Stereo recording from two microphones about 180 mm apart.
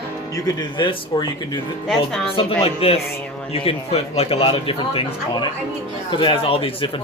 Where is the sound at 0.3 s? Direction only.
25° left (ahead or behind).